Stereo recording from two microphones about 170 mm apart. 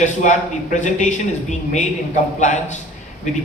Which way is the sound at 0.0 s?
45° left (ahead or behind).